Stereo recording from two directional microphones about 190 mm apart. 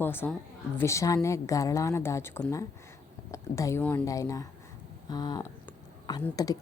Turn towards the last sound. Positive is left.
turn(degrees=20)  # may be behind; listen again after turning